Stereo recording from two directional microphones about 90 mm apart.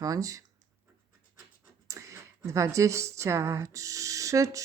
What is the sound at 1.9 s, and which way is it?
Speech, 35° right (ahead or behind).